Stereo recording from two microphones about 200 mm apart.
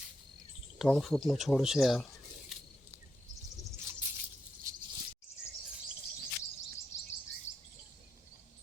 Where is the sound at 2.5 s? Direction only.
Centre (ahead or behind).